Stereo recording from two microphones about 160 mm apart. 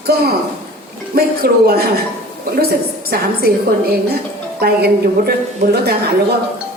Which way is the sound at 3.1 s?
75° right (ahead or behind).